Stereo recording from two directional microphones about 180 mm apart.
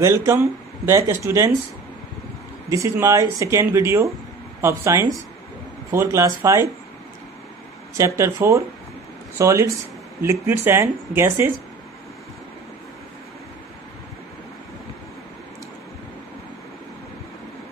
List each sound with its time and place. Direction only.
0.0 s speech: 15° right (ahead or behind)
2.7 s speech: 15° right (ahead or behind)
7.9 s speech: 15° right (ahead or behind)